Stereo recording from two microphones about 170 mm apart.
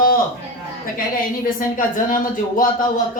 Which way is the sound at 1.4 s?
55° left (ahead or behind).